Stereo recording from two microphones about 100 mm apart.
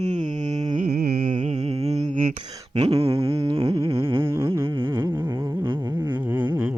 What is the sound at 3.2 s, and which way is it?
Humming, 75° right (ahead or behind).